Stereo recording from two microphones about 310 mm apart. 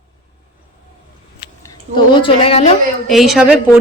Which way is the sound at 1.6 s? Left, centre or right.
Centre.